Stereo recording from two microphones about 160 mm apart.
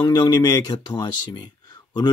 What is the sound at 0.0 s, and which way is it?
Speech, 25° left (ahead or behind).